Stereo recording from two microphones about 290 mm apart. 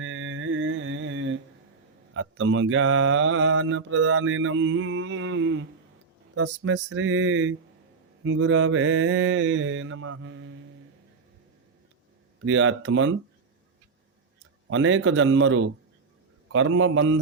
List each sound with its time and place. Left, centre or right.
0.0 s mantra: right
12.4 s mantra: right
14.7 s mantra: right